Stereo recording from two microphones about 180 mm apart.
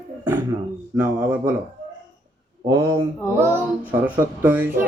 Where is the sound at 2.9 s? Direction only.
15° right (ahead or behind).